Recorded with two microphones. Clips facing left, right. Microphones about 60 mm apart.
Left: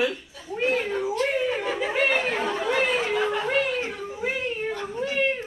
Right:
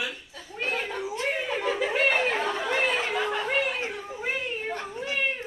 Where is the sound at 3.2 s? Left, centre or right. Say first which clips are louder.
Left 3 dB; centre.